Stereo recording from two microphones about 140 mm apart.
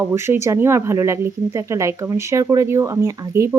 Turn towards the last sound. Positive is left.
turn(degrees=-25)  # may be behind; listen again after turning